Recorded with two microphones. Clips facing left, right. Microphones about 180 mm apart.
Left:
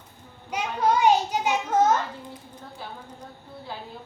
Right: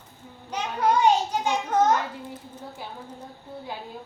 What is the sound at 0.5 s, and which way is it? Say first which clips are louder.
A child's voice: even; 10° left (ahead or behind).